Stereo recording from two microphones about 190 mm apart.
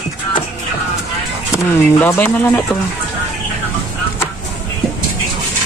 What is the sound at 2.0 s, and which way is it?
Speech, 10° left (ahead or behind).